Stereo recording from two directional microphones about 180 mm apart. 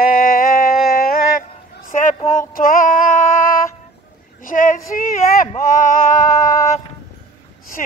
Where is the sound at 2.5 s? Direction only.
50° left (ahead or behind).